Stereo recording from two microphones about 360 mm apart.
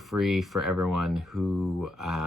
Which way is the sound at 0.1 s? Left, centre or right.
Centre.